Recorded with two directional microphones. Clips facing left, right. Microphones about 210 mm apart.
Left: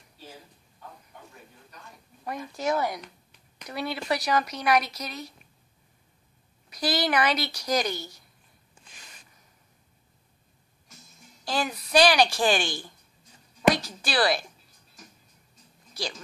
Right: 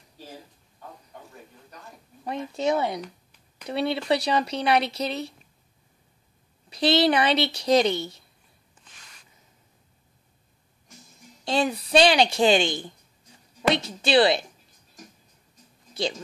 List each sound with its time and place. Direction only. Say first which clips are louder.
2.2 s speech: right 4 dB; 25° right (ahead or behind)
6.7 s speech: right 6 dB; 25° right (ahead or behind)
11.4 s speech: right 5 dB; 25° right (ahead or behind)
15.9 s speech: right 7 dB; 25° right (ahead or behind)